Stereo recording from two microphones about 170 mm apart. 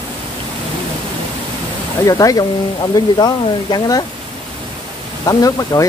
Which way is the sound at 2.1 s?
20° left (ahead or behind).